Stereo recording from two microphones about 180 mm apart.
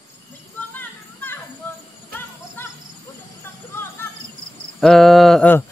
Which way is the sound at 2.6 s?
10° left (ahead or behind).